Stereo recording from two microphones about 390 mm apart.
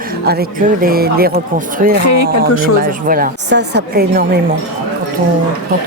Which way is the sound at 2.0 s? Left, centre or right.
Left.